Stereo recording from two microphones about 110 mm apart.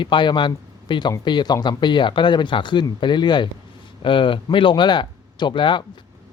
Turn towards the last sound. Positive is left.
turn(degrees=45)  # may be behind; listen again after turning